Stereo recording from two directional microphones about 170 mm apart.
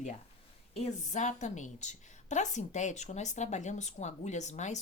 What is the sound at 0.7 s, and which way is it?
A woman's voice, 40° left (ahead or behind).